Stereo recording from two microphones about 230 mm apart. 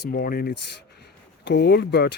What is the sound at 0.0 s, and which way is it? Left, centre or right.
Speech, left.